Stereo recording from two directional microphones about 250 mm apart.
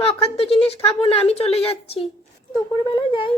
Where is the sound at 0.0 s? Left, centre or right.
Left.